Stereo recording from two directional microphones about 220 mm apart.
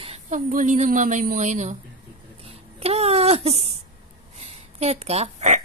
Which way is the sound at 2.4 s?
25° right (ahead or behind).